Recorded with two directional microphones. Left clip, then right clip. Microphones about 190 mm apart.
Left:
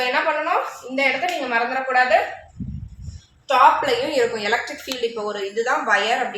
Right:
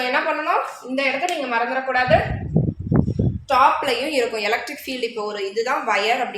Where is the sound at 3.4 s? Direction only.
40° right (ahead or behind).